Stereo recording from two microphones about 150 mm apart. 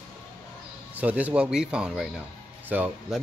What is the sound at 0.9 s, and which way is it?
Speech, 10° right (ahead or behind).